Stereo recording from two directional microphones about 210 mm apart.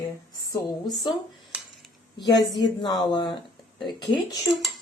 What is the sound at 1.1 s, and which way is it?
Speech, 20° left (ahead or behind).